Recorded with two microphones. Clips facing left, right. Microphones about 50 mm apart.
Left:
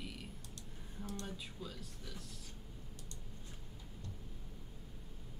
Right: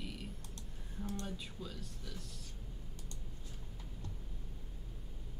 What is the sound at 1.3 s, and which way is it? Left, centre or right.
Speech, centre.